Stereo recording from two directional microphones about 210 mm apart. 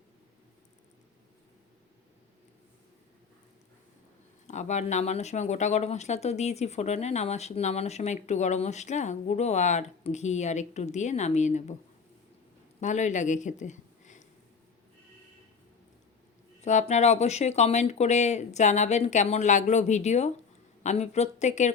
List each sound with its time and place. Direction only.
4.4 s speech: 35° left (ahead or behind)
12.8 s speech: 35° left (ahead or behind)
16.6 s speech: 35° left (ahead or behind)